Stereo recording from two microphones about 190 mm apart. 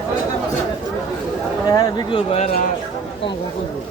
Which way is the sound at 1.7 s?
20° left (ahead or behind).